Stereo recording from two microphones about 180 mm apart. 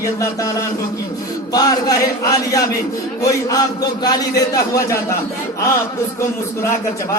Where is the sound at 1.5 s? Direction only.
20° left (ahead or behind).